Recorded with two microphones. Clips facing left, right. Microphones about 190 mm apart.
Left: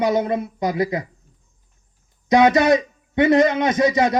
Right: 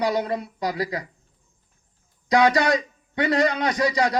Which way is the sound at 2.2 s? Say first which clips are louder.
Left 4 dB; 20° left (ahead or behind).